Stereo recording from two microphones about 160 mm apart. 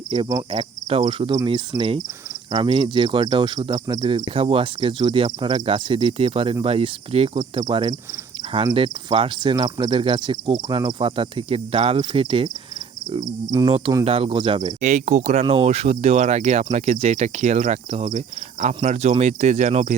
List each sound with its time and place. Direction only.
0.1 s speech: 35° right (ahead or behind)
13.1 s speech: 25° right (ahead or behind)
14.0 s speech: 35° right (ahead or behind)
14.8 s speech: 50° right (ahead or behind)